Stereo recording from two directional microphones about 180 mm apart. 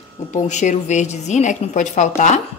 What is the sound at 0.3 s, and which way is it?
A woman's voice, 45° left (ahead or behind).